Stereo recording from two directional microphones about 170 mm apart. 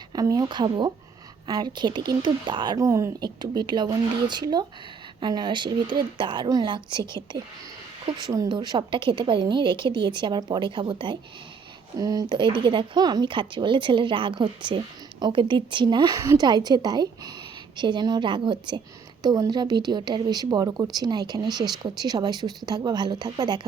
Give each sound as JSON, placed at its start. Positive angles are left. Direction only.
{"t": 0.1, "sound": "speech", "side_deg": -20}